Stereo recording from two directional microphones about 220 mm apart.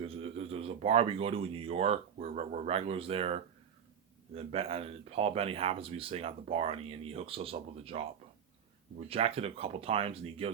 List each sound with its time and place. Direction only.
0.0 s a sound: 25° right (ahead or behind)
2.2 s speech: 30° right (ahead or behind)
9.0 s speech: 25° right (ahead or behind)